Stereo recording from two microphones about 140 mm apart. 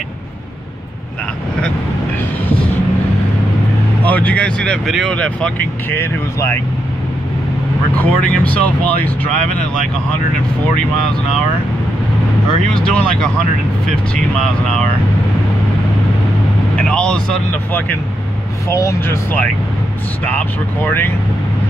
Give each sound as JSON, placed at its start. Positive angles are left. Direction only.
{"t": 4.0, "sound": "speech", "side_deg": 10}
{"t": 5.9, "sound": "speech", "side_deg": 20}
{"t": 8.0, "sound": "speech", "side_deg": 10}
{"t": 12.7, "sound": "speech", "side_deg": 5}
{"t": 16.7, "sound": "speech", "side_deg": 5}
{"t": 20.2, "sound": "speech", "side_deg": 10}